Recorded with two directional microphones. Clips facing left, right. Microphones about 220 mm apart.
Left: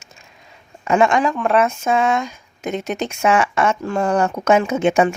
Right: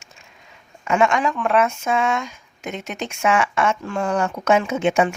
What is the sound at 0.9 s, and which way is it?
Speech, 35° left (ahead or behind).